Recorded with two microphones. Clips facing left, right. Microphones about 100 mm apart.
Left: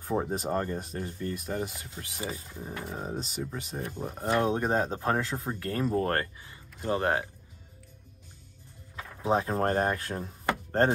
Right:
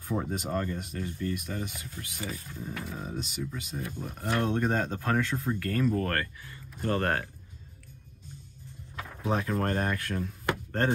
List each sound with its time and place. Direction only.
0.0 s speech: 35° left (ahead or behind)
4.3 s speech: 20° left (ahead or behind)
9.2 s speech: 25° left (ahead or behind)